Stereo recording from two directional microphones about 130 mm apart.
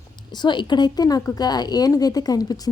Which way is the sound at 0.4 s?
35° left (ahead or behind).